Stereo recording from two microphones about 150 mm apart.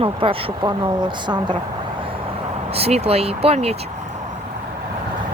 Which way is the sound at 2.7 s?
45° right (ahead or behind).